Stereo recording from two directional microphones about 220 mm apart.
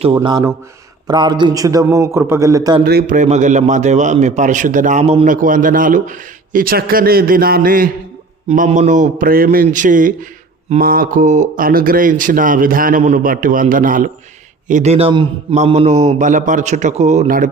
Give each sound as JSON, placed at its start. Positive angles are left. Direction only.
{"t": 0.0, "sound": "a man's voice", "side_deg": -20}
{"t": 2.8, "sound": "a man's voice", "side_deg": -40}